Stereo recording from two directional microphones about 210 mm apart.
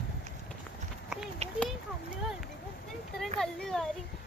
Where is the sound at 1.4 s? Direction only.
30° right (ahead or behind).